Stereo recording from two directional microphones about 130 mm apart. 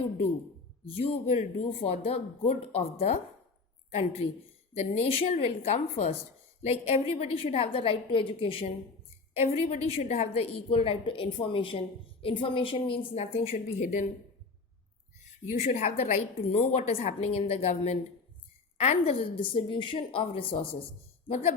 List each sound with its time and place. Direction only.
1.3 s a woman's voice: 45° left (ahead or behind)
13.7 s speech: 75° left (ahead or behind)
15.4 s a woman's voice: 55° left (ahead or behind)
16.4 s a woman's voice: 50° left (ahead or behind)